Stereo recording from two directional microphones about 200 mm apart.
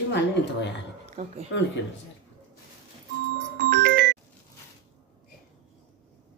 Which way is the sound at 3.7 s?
55° right (ahead or behind).